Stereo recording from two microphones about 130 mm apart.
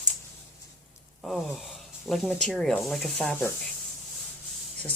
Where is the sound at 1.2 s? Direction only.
Centre (ahead or behind).